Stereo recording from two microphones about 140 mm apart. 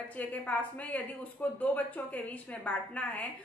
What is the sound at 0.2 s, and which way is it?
A woman's voice, 10° left (ahead or behind).